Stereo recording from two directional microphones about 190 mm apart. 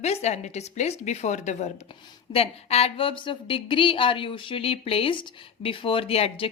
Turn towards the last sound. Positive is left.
turn(degrees=30)  # may be behind; listen again after turning